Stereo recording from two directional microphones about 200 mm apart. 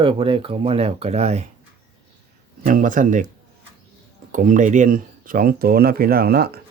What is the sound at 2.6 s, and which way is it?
Speech, 40° right (ahead or behind).